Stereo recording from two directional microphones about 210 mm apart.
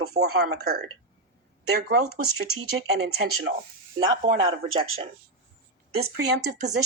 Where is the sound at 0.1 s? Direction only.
35° right (ahead or behind).